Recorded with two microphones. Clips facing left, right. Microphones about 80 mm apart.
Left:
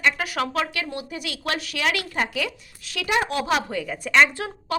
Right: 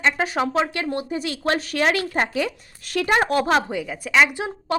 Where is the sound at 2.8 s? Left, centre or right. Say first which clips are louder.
Right 4 dB; right.